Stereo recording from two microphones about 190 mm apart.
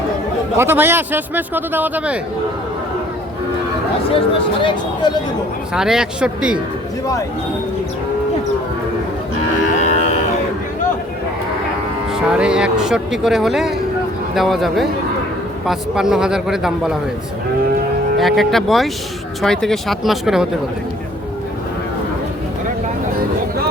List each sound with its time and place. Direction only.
0.5 s a man's voice: 10° right (ahead or behind)
4.1 s speech: 25° left (ahead or behind)
5.7 s speech: 5° right (ahead or behind)
9.7 s cattle: 35° left (ahead or behind)
12.1 s speech: 5° right (ahead or behind)
18.2 s speech: centre (ahead or behind)